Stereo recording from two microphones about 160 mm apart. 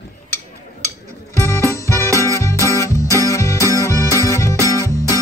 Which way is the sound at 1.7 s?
20° left (ahead or behind).